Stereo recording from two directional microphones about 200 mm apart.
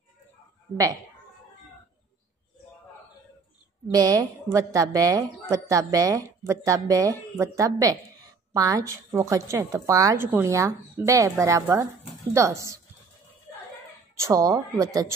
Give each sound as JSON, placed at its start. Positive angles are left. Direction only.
{"t": 3.8, "sound": "a woman's voice", "side_deg": -20}
{"t": 14.1, "sound": "a woman's voice", "side_deg": -15}